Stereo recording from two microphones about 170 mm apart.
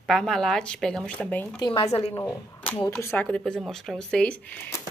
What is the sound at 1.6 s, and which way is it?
Speech, 30° left (ahead or behind).